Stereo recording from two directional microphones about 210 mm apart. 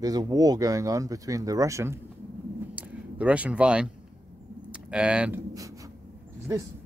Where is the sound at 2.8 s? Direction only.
5° right (ahead or behind).